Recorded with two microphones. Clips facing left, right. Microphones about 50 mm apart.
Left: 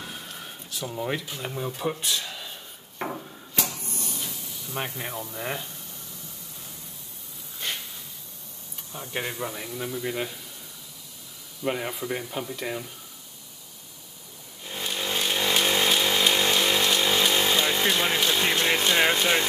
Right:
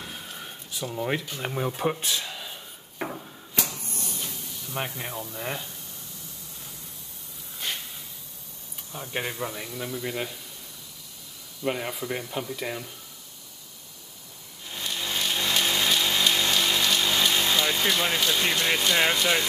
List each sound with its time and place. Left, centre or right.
0.0 s a sound: centre
1.4 s speech: right
2.2 s dishes: centre
3.6 s a sound: centre
8.9 s speech: centre
11.6 s speech: centre
14.7 s chainsaw: left
18.4 s speech: centre